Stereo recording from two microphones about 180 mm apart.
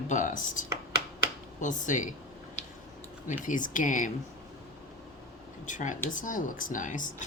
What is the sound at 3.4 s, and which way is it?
Speech, 45° left (ahead or behind).